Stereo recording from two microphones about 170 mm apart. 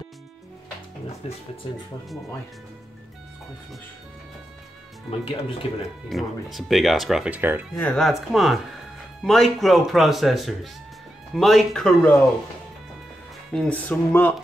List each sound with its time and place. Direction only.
1.2 s speech: 35° left (ahead or behind)
5.2 s speech: 30° left (ahead or behind)
6.0 s speech: centre (ahead or behind)
7.7 s speech: 5° left (ahead or behind)
13.5 s speech: 5° left (ahead or behind)